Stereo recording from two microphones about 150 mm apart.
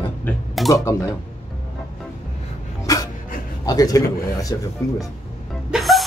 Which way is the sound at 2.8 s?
25° left (ahead or behind).